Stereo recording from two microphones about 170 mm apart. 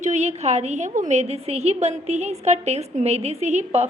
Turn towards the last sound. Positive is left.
turn(degrees=-40)  # may be behind; listen again after turning